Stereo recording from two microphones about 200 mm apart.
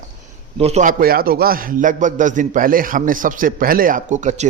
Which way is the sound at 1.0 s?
45° right (ahead or behind).